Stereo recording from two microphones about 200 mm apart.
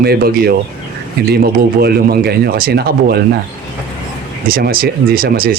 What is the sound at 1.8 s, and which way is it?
Speech, 50° right (ahead or behind).